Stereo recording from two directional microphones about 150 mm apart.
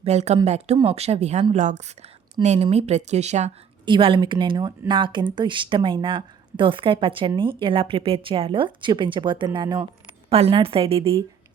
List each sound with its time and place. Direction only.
0.0 s speech: 45° right (ahead or behind)
3.8 s speech: 30° right (ahead or behind)